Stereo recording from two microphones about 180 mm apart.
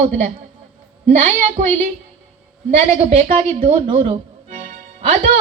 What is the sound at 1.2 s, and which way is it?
Speech, 45° right (ahead or behind).